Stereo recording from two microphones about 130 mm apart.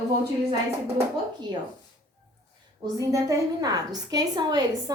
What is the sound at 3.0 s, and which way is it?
A woman's voice, 25° right (ahead or behind).